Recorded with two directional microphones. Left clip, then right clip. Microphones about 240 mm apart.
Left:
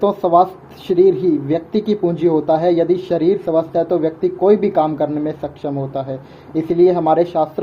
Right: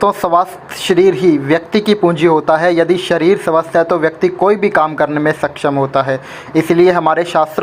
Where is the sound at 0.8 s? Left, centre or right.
Centre.